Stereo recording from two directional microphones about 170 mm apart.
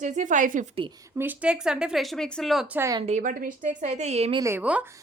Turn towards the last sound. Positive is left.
turn(degrees=-10)  # may be behind; listen again after turning